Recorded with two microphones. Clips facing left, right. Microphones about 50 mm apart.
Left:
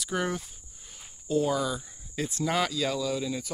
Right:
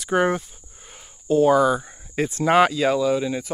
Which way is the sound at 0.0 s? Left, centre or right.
Right.